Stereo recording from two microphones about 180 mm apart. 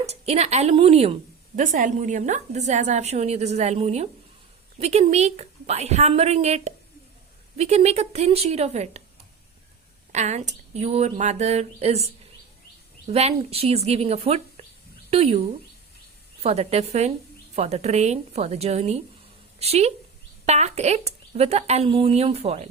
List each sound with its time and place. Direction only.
0.0 s a woman's voice: 35° right (ahead or behind)
10.1 s a woman's voice: 40° right (ahead or behind)
16.4 s a woman's voice: 35° right (ahead or behind)